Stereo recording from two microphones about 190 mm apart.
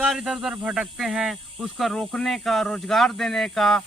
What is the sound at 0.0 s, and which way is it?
Speech, 5° right (ahead or behind).